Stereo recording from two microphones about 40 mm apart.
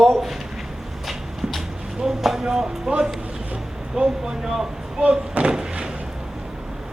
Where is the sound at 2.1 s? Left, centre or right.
Centre.